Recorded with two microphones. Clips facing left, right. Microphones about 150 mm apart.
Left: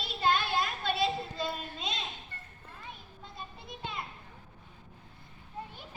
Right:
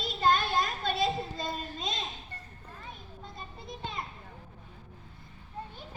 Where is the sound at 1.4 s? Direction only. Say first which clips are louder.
Even; 45° right (ahead or behind).